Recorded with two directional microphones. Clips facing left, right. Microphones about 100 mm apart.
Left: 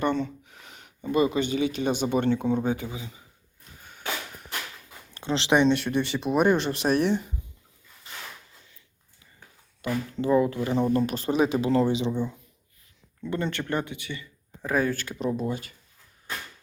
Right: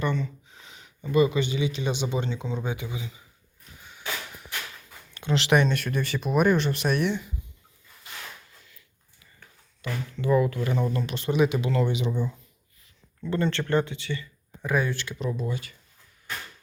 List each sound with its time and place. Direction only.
0.0 s a sound: 60° left (ahead or behind)
1.1 s speech: 40° left (ahead or behind)
3.8 s a sound: 45° left (ahead or behind)
5.1 s speech: 25° left (ahead or behind)
9.8 s speech: 50° left (ahead or behind)
10.2 s speech: 30° left (ahead or behind)
11.0 s speech: 40° left (ahead or behind); by 12.3 s 25° left (ahead or behind)
13.3 s speech: 15° left (ahead or behind)
14.6 s speech: 35° left (ahead or behind)